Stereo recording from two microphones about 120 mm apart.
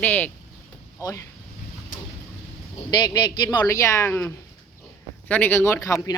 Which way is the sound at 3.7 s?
25° left (ahead or behind).